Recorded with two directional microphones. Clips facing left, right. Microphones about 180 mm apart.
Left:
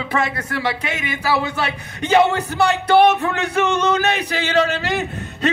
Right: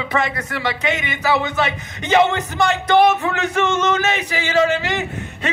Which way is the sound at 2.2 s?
35° left (ahead or behind).